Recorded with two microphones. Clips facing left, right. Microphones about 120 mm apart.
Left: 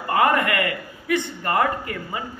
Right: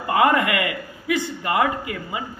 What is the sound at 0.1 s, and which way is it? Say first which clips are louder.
A man's voice: right 1 dB; 20° right (ahead or behind).